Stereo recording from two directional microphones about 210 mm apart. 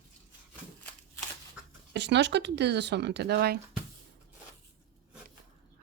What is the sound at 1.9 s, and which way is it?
Speech, 55° right (ahead or behind).